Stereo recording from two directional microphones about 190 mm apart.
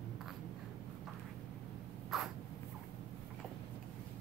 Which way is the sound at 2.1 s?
Centre (ahead or behind).